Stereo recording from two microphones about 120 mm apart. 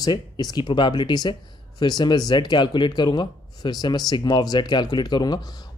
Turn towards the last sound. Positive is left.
turn(degrees=35)  # may be behind; listen again after turning